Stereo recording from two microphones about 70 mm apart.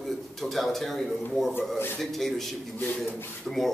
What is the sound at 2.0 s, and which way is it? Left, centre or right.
Speech, centre.